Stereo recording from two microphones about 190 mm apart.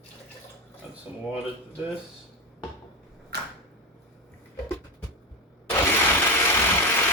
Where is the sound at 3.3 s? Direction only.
60° right (ahead or behind).